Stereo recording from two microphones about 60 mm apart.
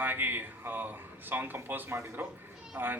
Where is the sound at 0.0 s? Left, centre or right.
Right.